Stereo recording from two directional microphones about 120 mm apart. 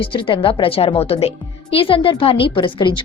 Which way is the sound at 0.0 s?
45° left (ahead or behind).